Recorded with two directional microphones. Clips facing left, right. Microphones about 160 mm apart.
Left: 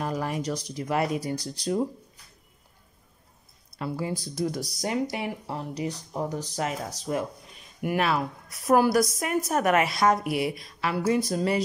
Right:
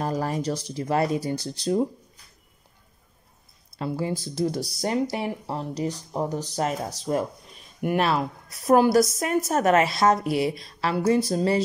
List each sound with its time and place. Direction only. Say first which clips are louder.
0.0 s a woman's voice: right 3 dB; 35° right (ahead or behind)
3.7 s a woman's voice: right 3 dB; 25° right (ahead or behind)